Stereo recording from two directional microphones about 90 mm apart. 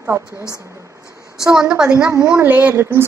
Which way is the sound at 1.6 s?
10° right (ahead or behind).